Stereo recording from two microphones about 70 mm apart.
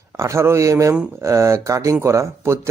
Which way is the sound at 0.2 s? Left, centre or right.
Right.